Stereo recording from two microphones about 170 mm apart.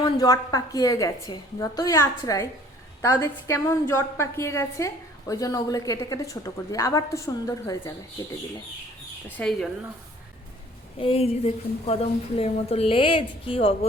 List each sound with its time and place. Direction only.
0.0 s a woman's voice: 20° left (ahead or behind)
9.4 s speech: centre (ahead or behind)
10.9 s a woman's voice: 35° left (ahead or behind)